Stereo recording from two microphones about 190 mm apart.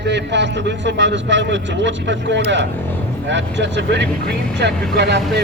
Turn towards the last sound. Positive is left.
turn(degrees=-60)  # may be behind; listen again after turning